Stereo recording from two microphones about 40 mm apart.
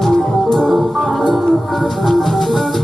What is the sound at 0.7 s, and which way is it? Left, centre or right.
Music, centre.